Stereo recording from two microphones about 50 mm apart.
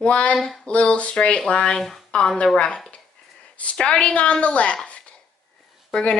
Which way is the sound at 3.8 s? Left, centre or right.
Centre.